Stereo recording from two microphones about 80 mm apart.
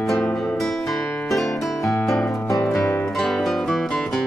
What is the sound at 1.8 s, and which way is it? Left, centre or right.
Music, centre.